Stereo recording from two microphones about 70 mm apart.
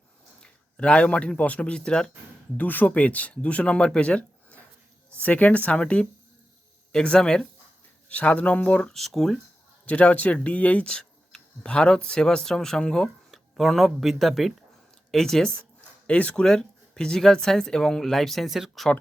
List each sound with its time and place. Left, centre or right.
0.3 s a man's voice: centre
2.6 s speech: left
8.8 s speech: centre
9.8 s speech: left
16.0 s speech: centre